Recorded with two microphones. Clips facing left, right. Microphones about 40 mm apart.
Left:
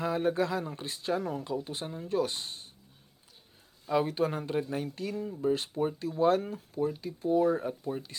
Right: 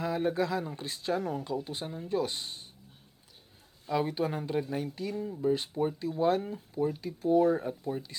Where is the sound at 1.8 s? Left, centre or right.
Centre.